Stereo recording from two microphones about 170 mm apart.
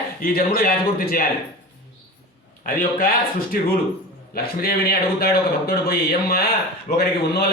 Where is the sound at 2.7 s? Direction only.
55° left (ahead or behind).